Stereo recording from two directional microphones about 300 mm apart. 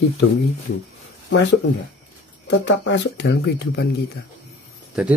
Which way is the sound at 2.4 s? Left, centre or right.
Left.